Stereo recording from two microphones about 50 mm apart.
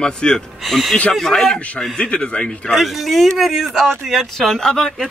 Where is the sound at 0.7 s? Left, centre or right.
Centre.